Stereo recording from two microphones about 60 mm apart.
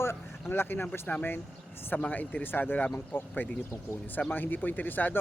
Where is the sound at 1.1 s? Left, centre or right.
Left.